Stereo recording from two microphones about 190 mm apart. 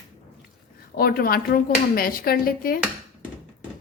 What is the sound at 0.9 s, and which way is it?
A woman's voice, 50° left (ahead or behind).